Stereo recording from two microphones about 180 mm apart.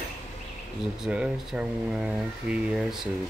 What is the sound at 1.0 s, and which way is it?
Speech, 5° right (ahead or behind).